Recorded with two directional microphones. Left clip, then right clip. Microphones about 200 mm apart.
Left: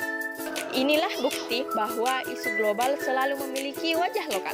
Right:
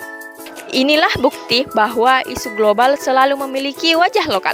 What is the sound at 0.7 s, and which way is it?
Speech, 55° right (ahead or behind).